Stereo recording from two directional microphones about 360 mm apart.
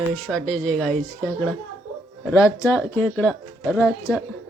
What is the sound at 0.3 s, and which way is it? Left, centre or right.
Speech, centre.